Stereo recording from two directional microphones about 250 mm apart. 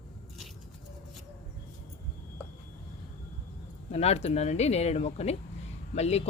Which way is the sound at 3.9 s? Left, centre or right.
Left.